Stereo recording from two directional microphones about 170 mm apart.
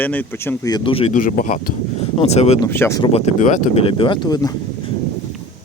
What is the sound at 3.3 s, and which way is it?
Speech, 45° left (ahead or behind).